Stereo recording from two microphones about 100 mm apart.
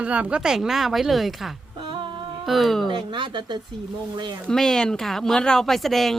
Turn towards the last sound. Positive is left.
turn(degrees=0)  # may be behind; listen again after turning